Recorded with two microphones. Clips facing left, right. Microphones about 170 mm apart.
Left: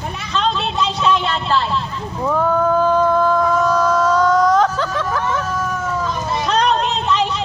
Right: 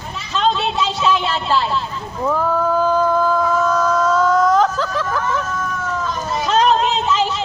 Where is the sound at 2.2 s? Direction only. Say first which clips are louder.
Left 2 dB; centre (ahead or behind).